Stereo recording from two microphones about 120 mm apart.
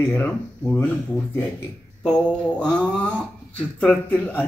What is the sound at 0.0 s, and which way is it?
Speech, 15° left (ahead or behind).